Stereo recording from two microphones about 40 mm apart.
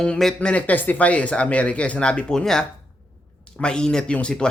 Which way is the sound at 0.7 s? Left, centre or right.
Left.